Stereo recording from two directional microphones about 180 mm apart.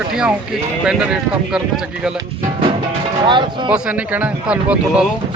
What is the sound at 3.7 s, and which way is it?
A man's voice, 5° right (ahead or behind).